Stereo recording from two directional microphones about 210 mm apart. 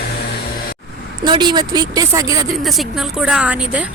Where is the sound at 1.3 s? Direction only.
20° right (ahead or behind).